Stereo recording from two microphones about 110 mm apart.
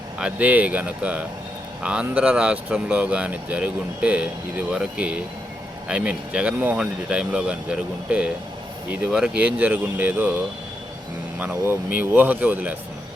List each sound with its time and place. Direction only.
0.2 s speech: 10° right (ahead or behind)
11.3 s speech: 15° right (ahead or behind)